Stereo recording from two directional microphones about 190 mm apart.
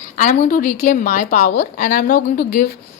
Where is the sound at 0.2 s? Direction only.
40° left (ahead or behind).